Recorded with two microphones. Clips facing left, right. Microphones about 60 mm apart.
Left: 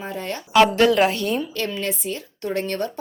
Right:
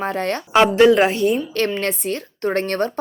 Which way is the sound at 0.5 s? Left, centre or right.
Right.